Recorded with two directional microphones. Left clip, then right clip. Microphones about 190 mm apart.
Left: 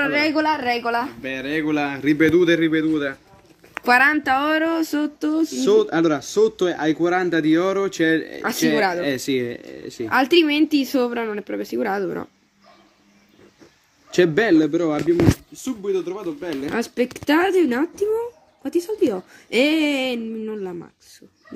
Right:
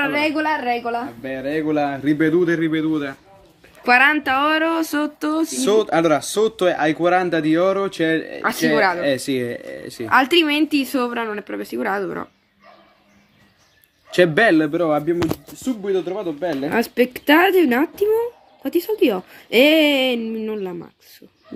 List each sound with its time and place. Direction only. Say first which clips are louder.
0.0 s a sound: even; 15° left (ahead or behind)
0.3 s speech: even; 5° right (ahead or behind)
1.2 s a man's voice: right 1 dB; 25° right (ahead or behind)
3.8 s speech: right 1 dB; 25° left (ahead or behind); by 5.5 s 10° left (ahead or behind)
5.5 s speech: even; 20° right (ahead or behind)
8.7 s speech: right 4 dB; 20° left (ahead or behind)
9.0 s speech: right 2 dB; 25° right (ahead or behind)
10.0 s speech: right 2 dB; 15° left (ahead or behind)
14.1 s speech: right 2 dB; 20° right (ahead or behind)
14.7 s a man's voice: right 1 dB; 35° right (ahead or behind)
16.7 s speech: right 4 dB; 5° right (ahead or behind)